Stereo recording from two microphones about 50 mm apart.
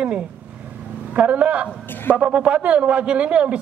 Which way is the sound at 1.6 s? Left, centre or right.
Left.